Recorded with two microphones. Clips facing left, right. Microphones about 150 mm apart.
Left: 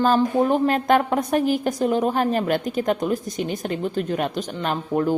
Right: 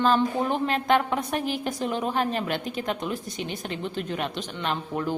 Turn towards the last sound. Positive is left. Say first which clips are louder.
# left 6 dB
turn(degrees=45)  # may be behind; listen again after turning